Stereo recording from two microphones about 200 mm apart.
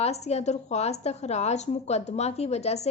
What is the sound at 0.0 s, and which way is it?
A woman's voice, 30° left (ahead or behind).